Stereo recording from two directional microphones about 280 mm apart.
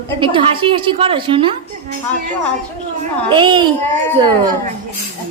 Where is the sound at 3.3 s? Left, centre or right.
Centre.